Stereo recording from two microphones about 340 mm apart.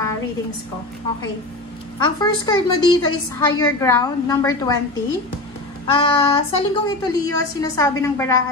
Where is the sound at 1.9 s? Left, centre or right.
Centre.